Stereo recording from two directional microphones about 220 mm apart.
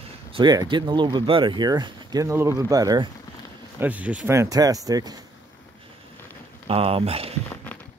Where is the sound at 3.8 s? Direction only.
5° right (ahead or behind).